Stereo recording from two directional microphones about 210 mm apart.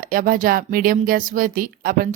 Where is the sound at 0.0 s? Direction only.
40° right (ahead or behind).